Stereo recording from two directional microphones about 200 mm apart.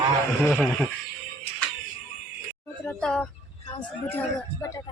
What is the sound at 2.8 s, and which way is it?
Music, 5° left (ahead or behind).